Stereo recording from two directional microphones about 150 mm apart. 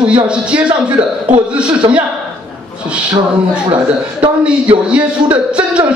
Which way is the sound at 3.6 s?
30° right (ahead or behind).